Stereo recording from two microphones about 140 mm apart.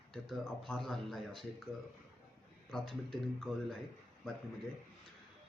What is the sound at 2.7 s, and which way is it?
Speech, centre (ahead or behind).